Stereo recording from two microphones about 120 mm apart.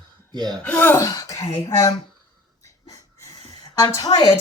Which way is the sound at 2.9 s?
30° left (ahead or behind).